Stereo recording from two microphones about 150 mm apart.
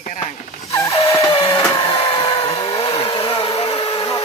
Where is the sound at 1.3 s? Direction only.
35° left (ahead or behind).